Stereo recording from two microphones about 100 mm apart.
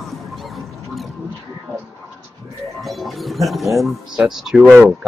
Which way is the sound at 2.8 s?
Centre (ahead or behind).